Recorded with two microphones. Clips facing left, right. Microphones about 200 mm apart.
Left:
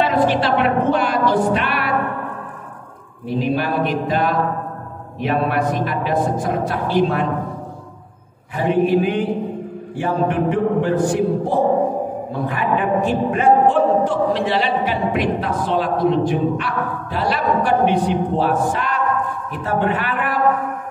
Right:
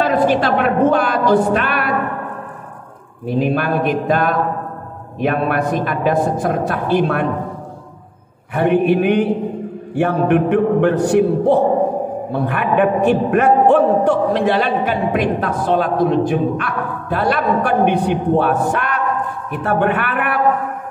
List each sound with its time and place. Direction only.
0.1 s a woman's voice: 50° right (ahead or behind)
3.3 s a man's voice: 55° right (ahead or behind)
8.5 s mantra: 65° right (ahead or behind)
9.9 s a man's voice: 65° right (ahead or behind)